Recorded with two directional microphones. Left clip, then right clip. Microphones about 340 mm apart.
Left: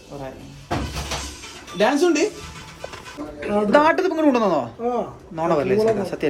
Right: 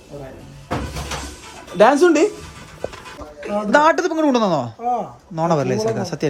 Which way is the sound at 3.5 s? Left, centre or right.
Right.